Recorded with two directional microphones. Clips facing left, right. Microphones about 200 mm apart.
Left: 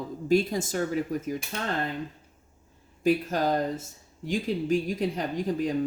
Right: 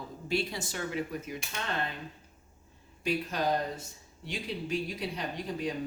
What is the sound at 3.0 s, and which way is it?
Speech, 45° left (ahead or behind).